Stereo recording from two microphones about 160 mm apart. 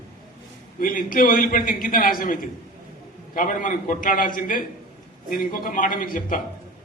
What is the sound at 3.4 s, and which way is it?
A man's voice, 55° left (ahead or behind).